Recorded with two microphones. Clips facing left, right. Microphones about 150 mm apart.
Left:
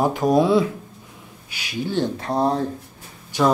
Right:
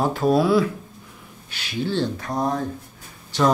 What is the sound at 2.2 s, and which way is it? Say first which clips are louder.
Speech: left 3 dB; 30° left (ahead or behind).